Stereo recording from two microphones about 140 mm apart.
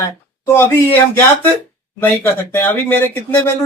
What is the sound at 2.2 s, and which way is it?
Speech, 15° left (ahead or behind).